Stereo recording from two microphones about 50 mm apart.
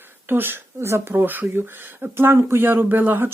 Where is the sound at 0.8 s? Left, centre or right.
Right.